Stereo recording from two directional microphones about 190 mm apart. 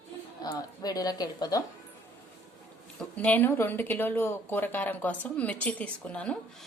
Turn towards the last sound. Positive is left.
turn(degrees=5)  # may be behind; listen again after turning